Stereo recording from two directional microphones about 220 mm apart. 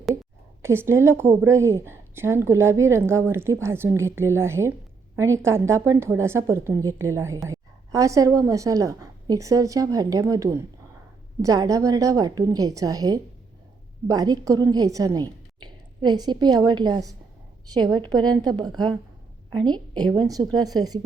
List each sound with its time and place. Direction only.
0.6 s a woman's voice: 10° right (ahead or behind)